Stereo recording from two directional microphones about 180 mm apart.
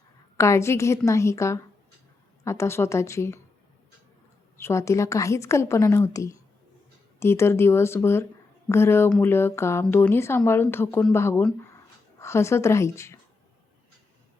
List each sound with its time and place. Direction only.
0.3 s speech: 15° left (ahead or behind)
4.5 s speech: 15° left (ahead or behind)